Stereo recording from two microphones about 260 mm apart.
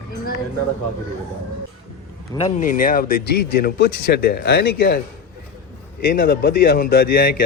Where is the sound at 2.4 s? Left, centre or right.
Left.